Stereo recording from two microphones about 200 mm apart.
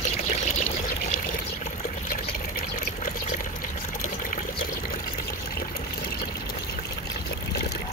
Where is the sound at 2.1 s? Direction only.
40° left (ahead or behind).